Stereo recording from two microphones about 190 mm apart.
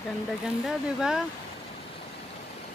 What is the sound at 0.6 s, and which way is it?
Speech, centre (ahead or behind).